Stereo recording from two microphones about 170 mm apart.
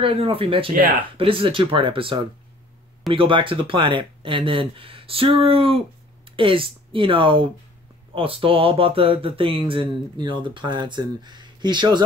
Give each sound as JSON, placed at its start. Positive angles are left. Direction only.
{"t": 0.0, "sound": "speech", "side_deg": -35}